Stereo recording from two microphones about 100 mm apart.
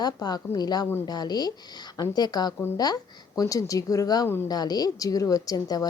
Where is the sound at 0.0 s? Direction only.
45° left (ahead or behind).